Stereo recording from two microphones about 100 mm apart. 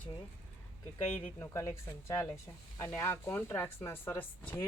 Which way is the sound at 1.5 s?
30° left (ahead or behind).